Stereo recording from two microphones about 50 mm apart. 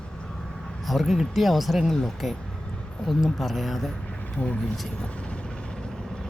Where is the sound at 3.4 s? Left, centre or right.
Centre.